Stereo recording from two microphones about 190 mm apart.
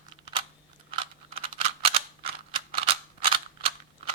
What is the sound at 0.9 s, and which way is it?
Computer keyboard, 30° right (ahead or behind).